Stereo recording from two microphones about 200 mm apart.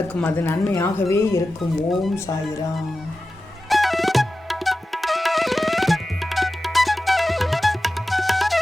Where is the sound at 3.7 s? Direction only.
Centre (ahead or behind).